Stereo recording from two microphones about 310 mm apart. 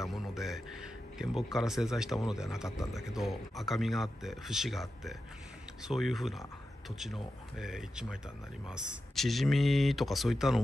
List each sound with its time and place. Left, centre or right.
0.0 s music: centre
1.1 s speech: centre